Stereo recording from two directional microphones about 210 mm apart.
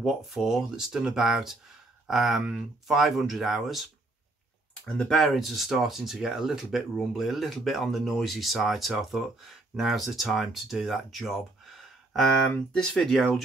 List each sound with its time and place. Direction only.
0.0 s speech: centre (ahead or behind)